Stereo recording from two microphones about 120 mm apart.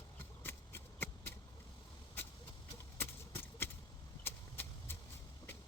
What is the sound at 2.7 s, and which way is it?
Clip-clop, 15° left (ahead or behind).